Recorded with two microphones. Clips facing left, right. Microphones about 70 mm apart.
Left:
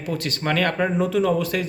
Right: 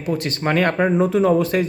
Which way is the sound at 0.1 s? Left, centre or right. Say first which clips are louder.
Right 4 dB; right.